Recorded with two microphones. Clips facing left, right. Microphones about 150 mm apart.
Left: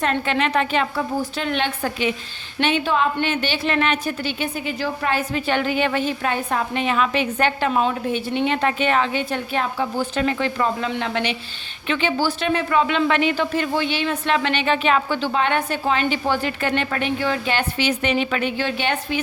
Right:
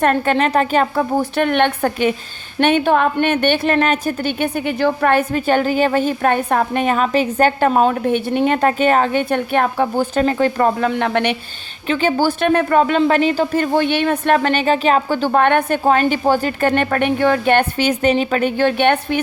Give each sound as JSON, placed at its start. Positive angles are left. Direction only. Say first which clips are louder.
{"t": 0.0, "sound": "a woman's voice", "louder": "right 6 dB", "side_deg": -45}
{"t": 11.9, "sound": "a woman's voice", "louder": "right 5 dB", "side_deg": -45}